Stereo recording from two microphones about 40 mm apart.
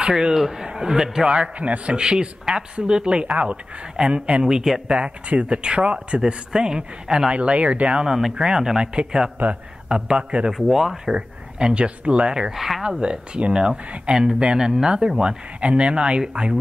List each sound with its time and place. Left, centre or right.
0.0 s speech: centre
1.2 s speech: right
2.0 s speech: centre
4.5 s speech: centre
4.8 s speech: right
7.3 s speech: right
8.0 s speech: centre
10.5 s speech: centre
11.1 s speech: right
12.5 s speech: centre
13.0 s speech: right